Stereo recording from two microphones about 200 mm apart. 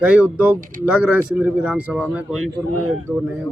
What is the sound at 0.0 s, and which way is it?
Speech, 5° right (ahead or behind).